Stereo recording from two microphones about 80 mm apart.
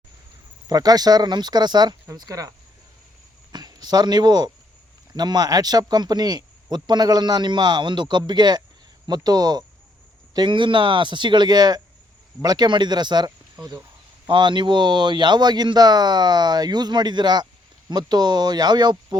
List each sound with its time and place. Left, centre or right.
0.7 s speech: right
2.1 s speech: right
3.5 s speech: right
9.0 s speech: right
10.3 s speech: right
14.3 s speech: right